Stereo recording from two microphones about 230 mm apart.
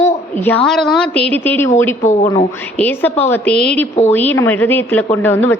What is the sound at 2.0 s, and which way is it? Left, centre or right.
Speech, left.